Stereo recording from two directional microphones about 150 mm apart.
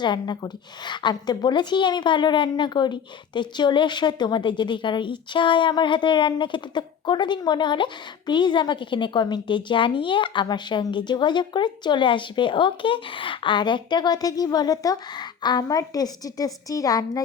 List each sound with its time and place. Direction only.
0.0 s a woman's voice: 30° left (ahead or behind)